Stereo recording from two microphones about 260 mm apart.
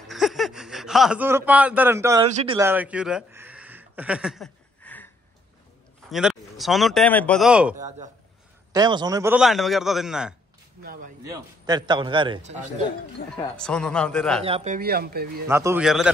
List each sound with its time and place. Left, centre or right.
0.1 s a sound: centre
2.2 s speech: right
2.6 s a sound: centre
6.0 s speech: centre
8.7 s a man's voice: centre
10.8 s a sound: right
11.2 s a man's voice: centre
13.6 s a man's voice: centre
14.4 s speech: right
15.4 s a man's voice: centre